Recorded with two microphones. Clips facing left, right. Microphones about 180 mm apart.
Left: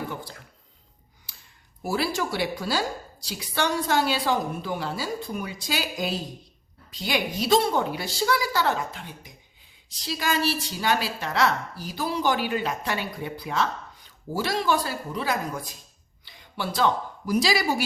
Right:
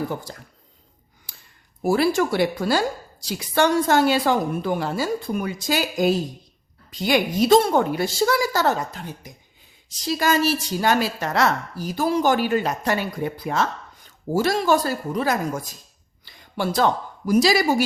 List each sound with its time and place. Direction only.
1.8 s a woman's voice: 50° right (ahead or behind)